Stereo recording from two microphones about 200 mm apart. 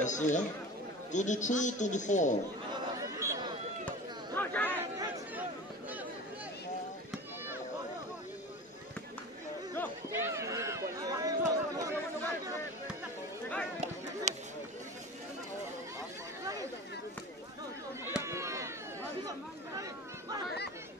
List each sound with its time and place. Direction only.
0.0 s a man's voice: 35° left (ahead or behind)
3.0 s a sound: 15° right (ahead or behind)
4.4 s chatter: 10° left (ahead or behind)
4.7 s chatter: 10° right (ahead or behind)
10.1 s run: 15° right (ahead or behind)
14.3 s a sound: 35° right (ahead or behind)
18.0 s chop: 10° right (ahead or behind)